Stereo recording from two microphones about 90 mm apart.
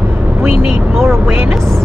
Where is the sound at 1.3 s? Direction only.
15° right (ahead or behind).